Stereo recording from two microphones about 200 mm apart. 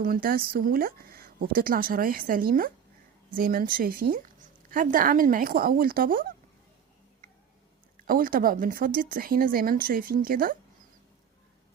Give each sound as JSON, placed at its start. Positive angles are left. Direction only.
{"t": 0.0, "sound": "a woman's voice", "side_deg": -45}
{"t": 8.0, "sound": "a woman's voice", "side_deg": -45}